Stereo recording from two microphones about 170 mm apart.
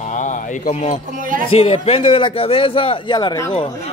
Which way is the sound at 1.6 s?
35° left (ahead or behind).